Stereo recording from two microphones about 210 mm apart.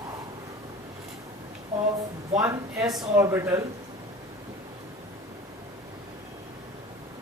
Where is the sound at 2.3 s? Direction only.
15° right (ahead or behind).